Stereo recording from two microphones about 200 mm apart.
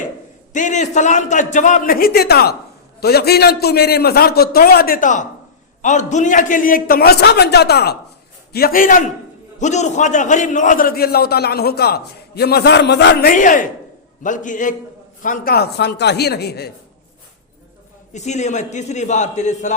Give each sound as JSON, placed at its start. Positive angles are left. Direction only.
{"t": 0.5, "sound": "a man's voice", "side_deg": 40}
{"t": 18.1, "sound": "a man's voice", "side_deg": 35}